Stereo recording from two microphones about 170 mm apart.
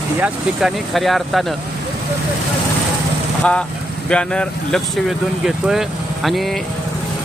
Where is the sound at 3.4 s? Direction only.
5° left (ahead or behind).